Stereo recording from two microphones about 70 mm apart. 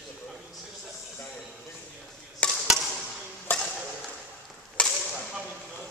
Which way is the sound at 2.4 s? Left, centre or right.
Centre.